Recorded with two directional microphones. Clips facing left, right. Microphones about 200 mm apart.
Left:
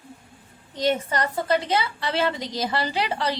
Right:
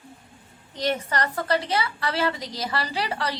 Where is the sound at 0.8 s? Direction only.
20° left (ahead or behind).